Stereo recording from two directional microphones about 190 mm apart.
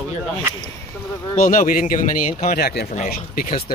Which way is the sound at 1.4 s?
45° left (ahead or behind).